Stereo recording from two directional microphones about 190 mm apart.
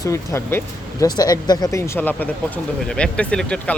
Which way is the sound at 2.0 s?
10° left (ahead or behind).